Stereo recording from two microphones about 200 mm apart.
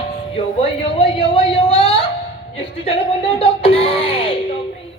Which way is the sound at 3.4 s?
30° left (ahead or behind).